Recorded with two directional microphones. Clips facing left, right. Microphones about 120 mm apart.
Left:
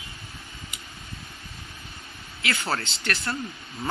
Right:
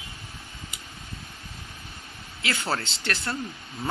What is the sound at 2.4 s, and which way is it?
Speech, 25° right (ahead or behind).